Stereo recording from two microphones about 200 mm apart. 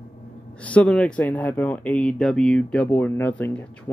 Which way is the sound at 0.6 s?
5° left (ahead or behind).